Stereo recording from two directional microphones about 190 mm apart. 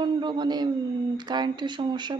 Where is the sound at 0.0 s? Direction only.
25° right (ahead or behind).